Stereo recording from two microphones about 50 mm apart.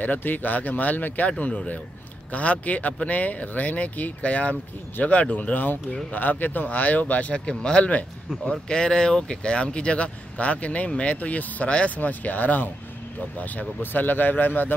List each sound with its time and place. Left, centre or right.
0.0 s speech: left
2.3 s speech: left
7.4 s speech: centre; by 14.8 s left